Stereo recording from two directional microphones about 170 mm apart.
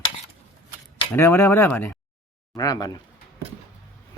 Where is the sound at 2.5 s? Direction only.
20° left (ahead or behind).